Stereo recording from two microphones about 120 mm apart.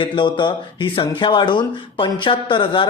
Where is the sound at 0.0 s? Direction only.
40° left (ahead or behind).